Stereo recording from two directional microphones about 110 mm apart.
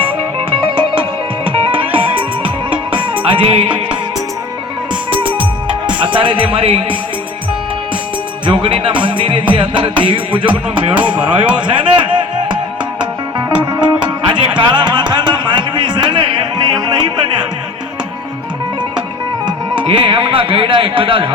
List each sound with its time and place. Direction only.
1.5 s music: 55° right (ahead or behind)
5.1 s music: 50° right (ahead or behind)
8.4 s music: 50° right (ahead or behind)
11.2 s speech: 10° right (ahead or behind)
11.6 s music: 45° right (ahead or behind)
14.3 s music: 45° right (ahead or behind)
19.5 s speech: 45° right (ahead or behind)